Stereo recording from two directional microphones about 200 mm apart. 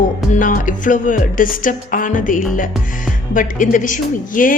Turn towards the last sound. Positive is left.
turn(degrees=40)  # may be behind; listen again after turning